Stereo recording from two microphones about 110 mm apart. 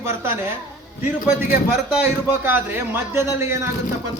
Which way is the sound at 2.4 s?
20° right (ahead or behind).